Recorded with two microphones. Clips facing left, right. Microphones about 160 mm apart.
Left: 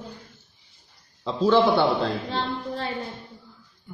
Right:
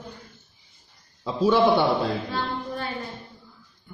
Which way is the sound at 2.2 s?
30° left (ahead or behind).